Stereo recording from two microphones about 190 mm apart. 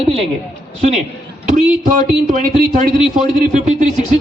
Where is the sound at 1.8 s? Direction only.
45° right (ahead or behind).